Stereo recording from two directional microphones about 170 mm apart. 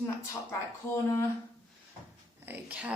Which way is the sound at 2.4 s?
10° right (ahead or behind).